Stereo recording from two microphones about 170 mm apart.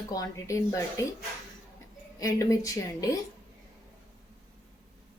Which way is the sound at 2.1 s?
20° left (ahead or behind).